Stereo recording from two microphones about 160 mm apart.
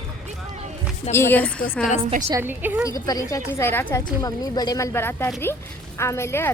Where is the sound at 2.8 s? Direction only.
20° left (ahead or behind).